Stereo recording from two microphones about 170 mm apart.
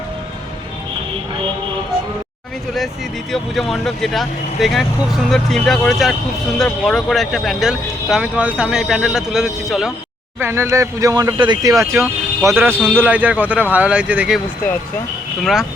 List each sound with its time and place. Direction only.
3.3 s speech: centre (ahead or behind)
10.4 s speech: 15° right (ahead or behind)